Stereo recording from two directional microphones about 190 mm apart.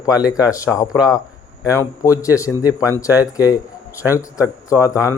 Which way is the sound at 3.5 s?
15° left (ahead or behind).